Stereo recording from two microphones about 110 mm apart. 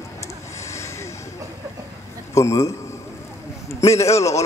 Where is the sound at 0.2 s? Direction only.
25° left (ahead or behind).